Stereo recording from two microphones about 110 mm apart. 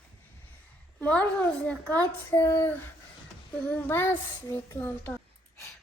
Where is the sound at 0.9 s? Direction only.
10° left (ahead or behind).